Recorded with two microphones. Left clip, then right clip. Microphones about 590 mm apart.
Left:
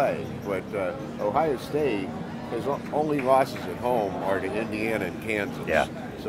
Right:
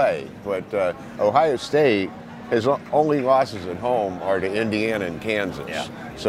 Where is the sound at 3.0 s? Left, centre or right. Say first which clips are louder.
Left 1 dB; right.